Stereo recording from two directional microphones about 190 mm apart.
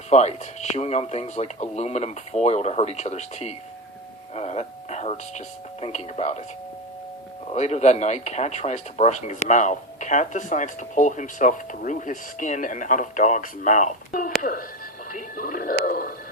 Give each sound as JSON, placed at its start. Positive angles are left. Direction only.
{"t": 0.1, "sound": "speech", "side_deg": 35}
{"t": 7.5, "sound": "speech", "side_deg": 35}